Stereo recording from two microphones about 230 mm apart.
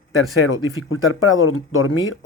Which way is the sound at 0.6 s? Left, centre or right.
Left.